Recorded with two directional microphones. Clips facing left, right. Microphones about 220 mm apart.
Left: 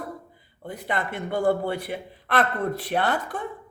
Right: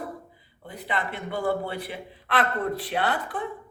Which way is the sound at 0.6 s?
45° left (ahead or behind).